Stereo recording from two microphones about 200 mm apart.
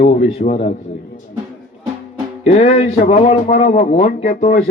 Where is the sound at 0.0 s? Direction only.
30° left (ahead or behind).